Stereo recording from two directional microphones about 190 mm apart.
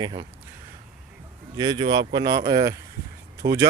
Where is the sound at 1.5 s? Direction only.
20° right (ahead or behind).